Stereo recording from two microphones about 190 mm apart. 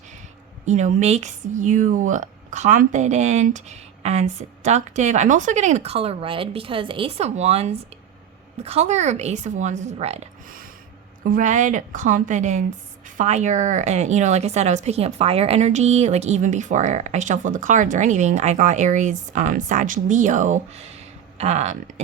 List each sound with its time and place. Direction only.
0.6 s a woman's voice: 40° right (ahead or behind)